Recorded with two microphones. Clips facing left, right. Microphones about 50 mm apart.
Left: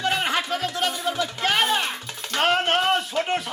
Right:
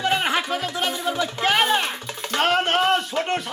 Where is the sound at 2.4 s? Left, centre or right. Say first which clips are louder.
Right 1 dB; centre.